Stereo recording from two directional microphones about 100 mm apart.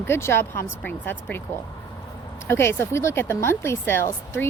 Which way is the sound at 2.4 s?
25° left (ahead or behind).